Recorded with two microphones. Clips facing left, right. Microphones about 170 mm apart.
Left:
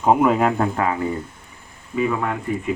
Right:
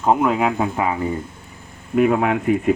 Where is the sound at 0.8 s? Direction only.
15° right (ahead or behind).